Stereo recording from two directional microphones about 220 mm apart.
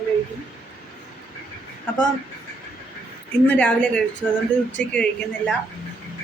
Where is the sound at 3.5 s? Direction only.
5° left (ahead or behind).